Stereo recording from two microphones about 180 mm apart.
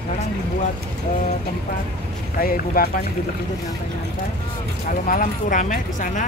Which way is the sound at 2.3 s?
55° left (ahead or behind).